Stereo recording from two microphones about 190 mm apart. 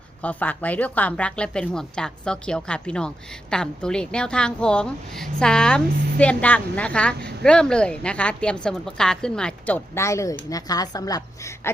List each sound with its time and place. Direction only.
0.2 s a woman's voice: 10° left (ahead or behind)